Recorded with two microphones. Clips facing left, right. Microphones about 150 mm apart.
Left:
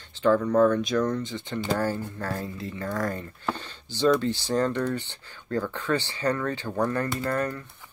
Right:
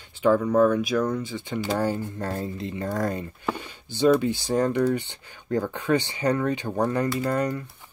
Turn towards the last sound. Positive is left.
turn(degrees=-15)  # may be behind; listen again after turning